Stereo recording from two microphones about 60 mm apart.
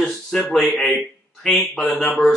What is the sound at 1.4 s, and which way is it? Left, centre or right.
Speech, centre.